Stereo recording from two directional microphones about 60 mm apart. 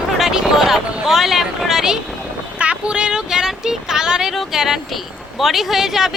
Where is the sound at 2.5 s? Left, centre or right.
Centre.